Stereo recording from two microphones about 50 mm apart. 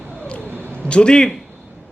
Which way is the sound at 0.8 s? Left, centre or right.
Left.